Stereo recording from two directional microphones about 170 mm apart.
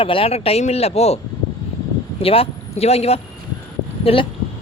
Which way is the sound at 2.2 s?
35° left (ahead or behind).